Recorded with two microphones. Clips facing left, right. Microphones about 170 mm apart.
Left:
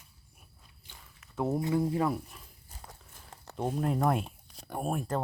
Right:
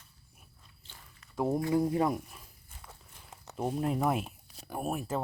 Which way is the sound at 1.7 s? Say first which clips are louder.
Right 2 dB; 20° right (ahead or behind).